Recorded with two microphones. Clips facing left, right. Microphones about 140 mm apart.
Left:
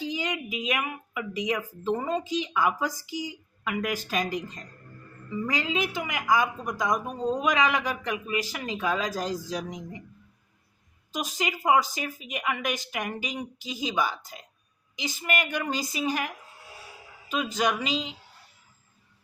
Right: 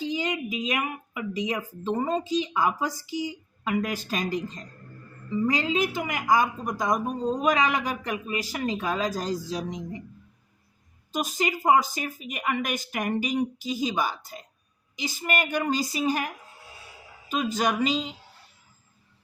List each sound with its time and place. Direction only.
0.1 s speech: 35° right (ahead or behind)
11.2 s speech: 40° right (ahead or behind)